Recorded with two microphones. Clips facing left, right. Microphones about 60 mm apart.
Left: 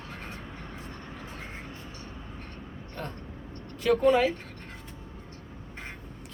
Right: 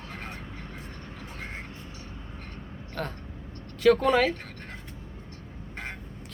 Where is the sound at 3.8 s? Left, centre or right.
Right.